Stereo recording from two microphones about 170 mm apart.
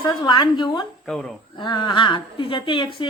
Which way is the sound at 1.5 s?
25° left (ahead or behind).